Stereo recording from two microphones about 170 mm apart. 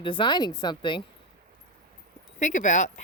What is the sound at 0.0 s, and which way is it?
Speech, 30° left (ahead or behind).